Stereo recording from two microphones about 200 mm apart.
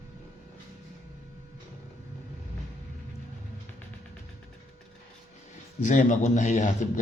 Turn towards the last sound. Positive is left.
turn(degrees=35)  # may be behind; listen again after turning